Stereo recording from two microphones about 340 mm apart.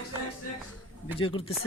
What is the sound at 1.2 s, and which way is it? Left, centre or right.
Speech, centre.